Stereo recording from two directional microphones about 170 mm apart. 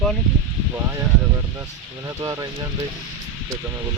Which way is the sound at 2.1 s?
15° right (ahead or behind).